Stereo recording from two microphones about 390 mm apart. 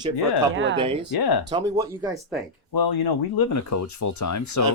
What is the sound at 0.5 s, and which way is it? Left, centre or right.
Speech, right.